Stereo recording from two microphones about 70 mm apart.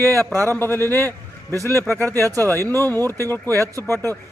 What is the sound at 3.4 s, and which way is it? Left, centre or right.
Speech, right.